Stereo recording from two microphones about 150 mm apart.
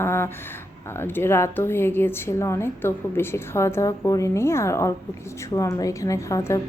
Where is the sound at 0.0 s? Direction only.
15° left (ahead or behind).